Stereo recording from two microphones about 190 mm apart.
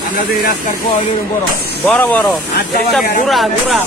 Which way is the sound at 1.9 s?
10° left (ahead or behind).